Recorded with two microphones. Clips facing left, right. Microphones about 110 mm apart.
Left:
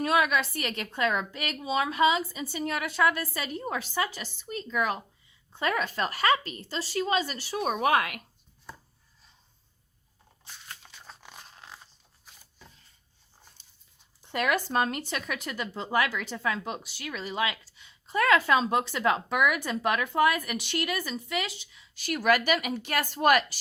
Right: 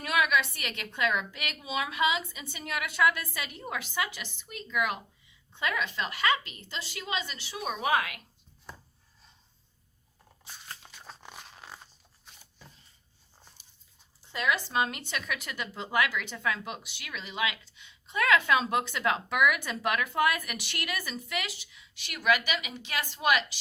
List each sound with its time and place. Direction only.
0.0 s a woman's voice: 35° left (ahead or behind); by 8.2 s 55° left (ahead or behind)
10.8 s a sound: centre (ahead or behind)
14.3 s a woman's voice: 55° left (ahead or behind)